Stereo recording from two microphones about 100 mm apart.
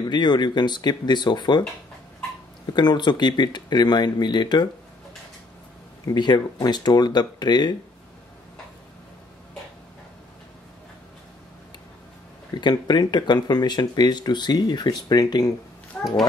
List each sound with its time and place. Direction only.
0.0 s speech: 45° left (ahead or behind)
2.7 s speech: 50° left (ahead or behind)
6.0 s speech: 45° left (ahead or behind)
12.5 s speech: 45° left (ahead or behind)
16.0 s a sound: 15° left (ahead or behind)